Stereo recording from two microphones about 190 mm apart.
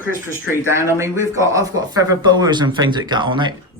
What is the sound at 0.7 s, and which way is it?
Speech, 15° right (ahead or behind).